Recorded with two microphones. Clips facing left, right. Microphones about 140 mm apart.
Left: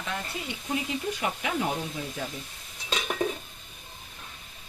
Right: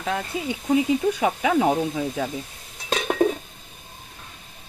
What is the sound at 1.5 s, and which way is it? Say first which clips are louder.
Speech: right 9 dB; 65° right (ahead or behind).